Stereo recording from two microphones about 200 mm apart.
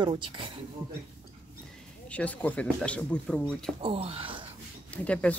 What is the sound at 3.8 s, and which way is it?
Speech, 30° right (ahead or behind).